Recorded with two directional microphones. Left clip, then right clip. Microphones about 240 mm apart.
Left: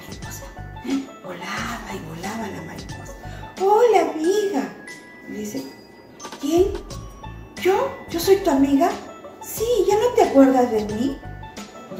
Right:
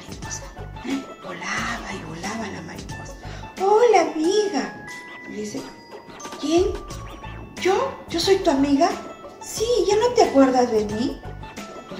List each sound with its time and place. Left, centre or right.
0.8 s music: centre
6.2 s speech: centre
7.5 s music: centre
9.5 s speech: centre